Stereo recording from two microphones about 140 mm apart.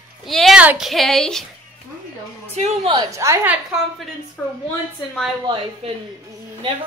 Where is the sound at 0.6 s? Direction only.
5° right (ahead or behind).